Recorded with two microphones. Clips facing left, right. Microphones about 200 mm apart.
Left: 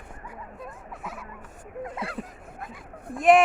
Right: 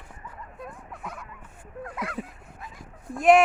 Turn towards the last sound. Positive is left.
turn(degrees=0)  # may be behind; listen again after turning